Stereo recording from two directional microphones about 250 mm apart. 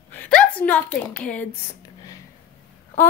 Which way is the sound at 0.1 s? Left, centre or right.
Centre.